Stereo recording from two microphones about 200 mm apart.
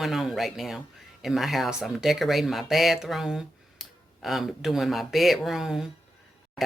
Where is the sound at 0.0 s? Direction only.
Centre (ahead or behind).